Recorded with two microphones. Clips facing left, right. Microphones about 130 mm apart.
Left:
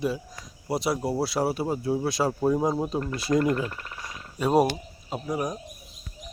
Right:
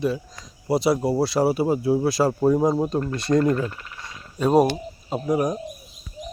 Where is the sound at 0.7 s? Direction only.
Centre (ahead or behind).